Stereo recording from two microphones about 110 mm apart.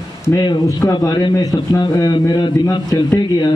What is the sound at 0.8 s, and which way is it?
A man's voice, 35° left (ahead or behind).